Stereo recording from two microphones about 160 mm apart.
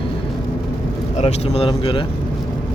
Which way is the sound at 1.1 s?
40° left (ahead or behind).